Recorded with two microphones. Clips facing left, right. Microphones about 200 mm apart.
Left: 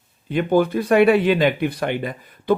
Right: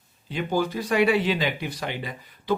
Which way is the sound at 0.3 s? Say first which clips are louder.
Left 8 dB; 55° left (ahead or behind).